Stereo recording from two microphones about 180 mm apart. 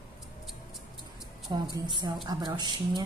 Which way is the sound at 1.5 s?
25° right (ahead or behind).